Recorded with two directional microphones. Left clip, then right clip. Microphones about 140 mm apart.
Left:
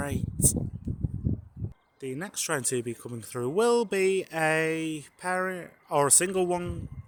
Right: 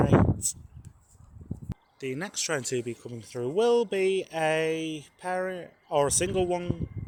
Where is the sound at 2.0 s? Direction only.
10° left (ahead or behind).